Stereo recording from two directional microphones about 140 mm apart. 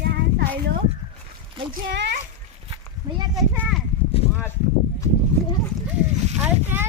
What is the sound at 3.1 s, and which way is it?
Speech, 35° right (ahead or behind).